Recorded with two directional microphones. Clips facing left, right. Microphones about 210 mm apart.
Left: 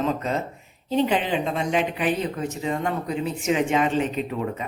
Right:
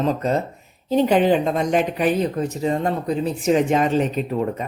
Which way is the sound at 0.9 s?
45° right (ahead or behind).